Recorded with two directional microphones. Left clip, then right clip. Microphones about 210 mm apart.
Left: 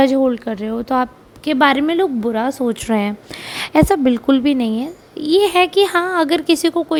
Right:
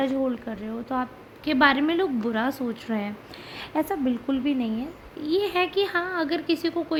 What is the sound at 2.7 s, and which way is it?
A woman's voice, 35° left (ahead or behind).